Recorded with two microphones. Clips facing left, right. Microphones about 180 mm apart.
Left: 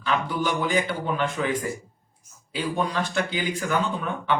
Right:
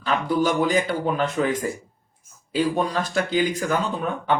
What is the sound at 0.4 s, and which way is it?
Speech, 40° right (ahead or behind).